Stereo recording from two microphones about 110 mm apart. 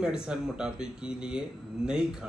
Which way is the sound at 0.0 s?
5° right (ahead or behind).